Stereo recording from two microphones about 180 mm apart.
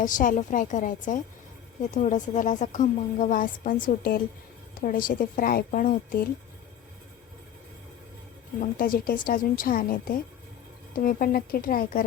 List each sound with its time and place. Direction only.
0.0 s a woman's voice: 45° left (ahead or behind)
8.8 s a woman's voice: 50° left (ahead or behind)